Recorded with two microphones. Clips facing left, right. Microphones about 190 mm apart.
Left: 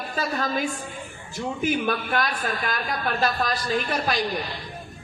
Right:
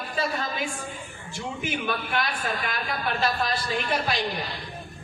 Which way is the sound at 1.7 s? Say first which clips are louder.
Left 2 dB; 45° left (ahead or behind).